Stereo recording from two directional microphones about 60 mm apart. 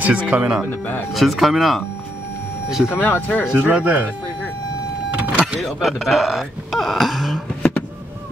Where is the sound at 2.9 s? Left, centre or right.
Left.